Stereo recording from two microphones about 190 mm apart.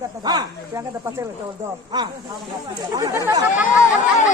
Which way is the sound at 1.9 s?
20° right (ahead or behind).